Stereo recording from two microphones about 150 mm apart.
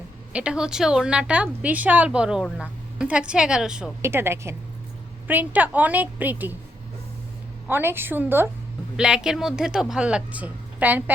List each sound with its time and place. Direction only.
0.3 s a woman's voice: 5° right (ahead or behind)
4.0 s a woman's voice: 15° right (ahead or behind)
7.7 s a woman's voice: 15° right (ahead or behind)